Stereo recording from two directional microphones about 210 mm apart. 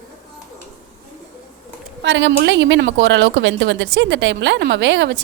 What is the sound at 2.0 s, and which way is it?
A woman's voice, 60° right (ahead or behind).